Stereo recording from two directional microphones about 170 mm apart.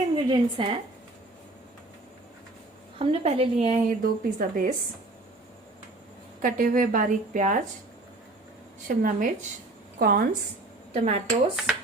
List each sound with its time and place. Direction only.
0.3 s a woman's voice: 30° right (ahead or behind)
3.0 s a woman's voice: 35° right (ahead or behind)
4.0 s a woman's voice: 55° right (ahead or behind)
6.4 s a woman's voice: 55° right (ahead or behind)
9.0 s a woman's voice: 55° right (ahead or behind)
10.9 s a woman's voice: 35° right (ahead or behind)